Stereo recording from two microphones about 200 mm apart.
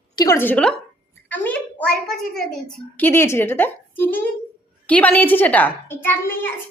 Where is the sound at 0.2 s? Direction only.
15° left (ahead or behind).